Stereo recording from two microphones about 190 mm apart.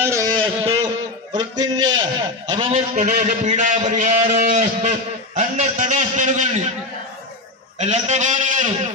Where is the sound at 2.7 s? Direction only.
40° right (ahead or behind).